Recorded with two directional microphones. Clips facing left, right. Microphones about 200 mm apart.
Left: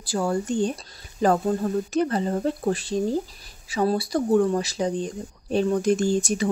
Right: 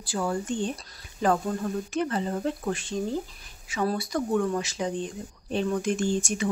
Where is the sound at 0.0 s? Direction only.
40° left (ahead or behind).